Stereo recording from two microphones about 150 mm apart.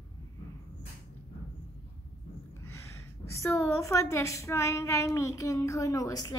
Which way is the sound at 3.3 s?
20° left (ahead or behind).